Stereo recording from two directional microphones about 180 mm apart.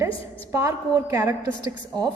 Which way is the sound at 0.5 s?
15° right (ahead or behind).